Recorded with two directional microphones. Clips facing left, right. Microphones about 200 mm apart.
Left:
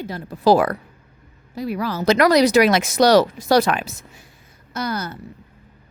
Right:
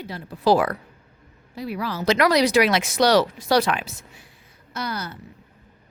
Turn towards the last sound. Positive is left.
turn(degrees=45)  # may be behind; listen again after turning